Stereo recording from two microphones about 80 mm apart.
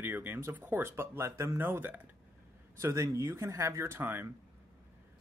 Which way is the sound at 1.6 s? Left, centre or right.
Right.